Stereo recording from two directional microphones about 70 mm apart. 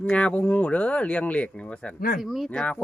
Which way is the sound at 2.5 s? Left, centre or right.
Centre.